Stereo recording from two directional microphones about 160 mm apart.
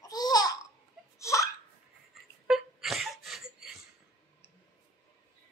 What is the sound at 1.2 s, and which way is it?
Laughter, 20° left (ahead or behind).